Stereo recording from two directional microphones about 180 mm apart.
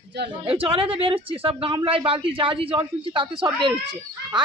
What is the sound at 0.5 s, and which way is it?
A woman's voice, 30° right (ahead or behind).